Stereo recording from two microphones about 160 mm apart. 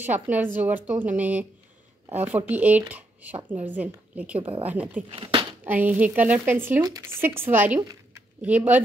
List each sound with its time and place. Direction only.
0.0 s a woman's voice: 10° right (ahead or behind)
5.1 s speech: 35° right (ahead or behind)
5.6 s a woman's voice: 10° right (ahead or behind)